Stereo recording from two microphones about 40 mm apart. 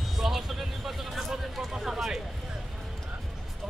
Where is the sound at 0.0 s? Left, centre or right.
Centre.